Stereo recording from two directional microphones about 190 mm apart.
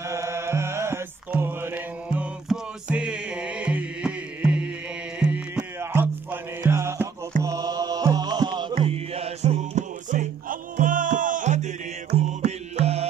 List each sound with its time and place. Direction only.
0.0 s music: 15° right (ahead or behind)
7.4 s mantra: 20° right (ahead or behind)
8.8 s music: 30° right (ahead or behind)